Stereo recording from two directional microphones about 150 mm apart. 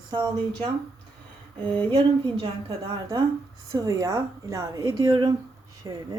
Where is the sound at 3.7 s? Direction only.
25° right (ahead or behind).